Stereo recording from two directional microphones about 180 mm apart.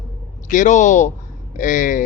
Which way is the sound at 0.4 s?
45° left (ahead or behind).